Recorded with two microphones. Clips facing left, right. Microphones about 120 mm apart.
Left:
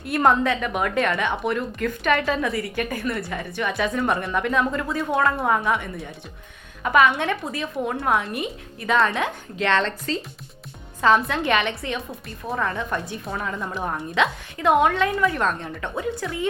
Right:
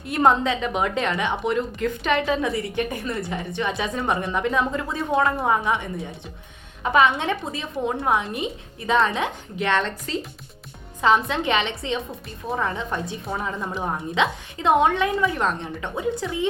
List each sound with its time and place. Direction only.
0.0 s a woman's voice: 20° right (ahead or behind)
11.3 s a woman's voice: 20° right (ahead or behind)